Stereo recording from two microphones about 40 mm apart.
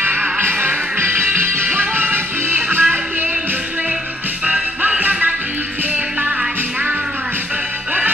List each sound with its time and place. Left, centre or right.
0.4 s music: right